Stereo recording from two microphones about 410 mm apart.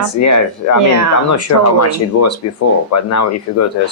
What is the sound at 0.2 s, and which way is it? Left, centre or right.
Speech, left.